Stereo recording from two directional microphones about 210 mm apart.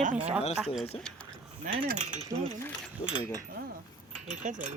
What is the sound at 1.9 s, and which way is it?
Speech, 35° right (ahead or behind).